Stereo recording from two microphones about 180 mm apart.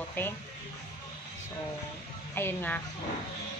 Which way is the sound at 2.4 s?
10° left (ahead or behind).